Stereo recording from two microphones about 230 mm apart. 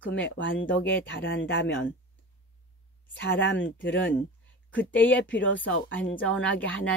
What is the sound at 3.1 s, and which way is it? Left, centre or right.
Speech, left.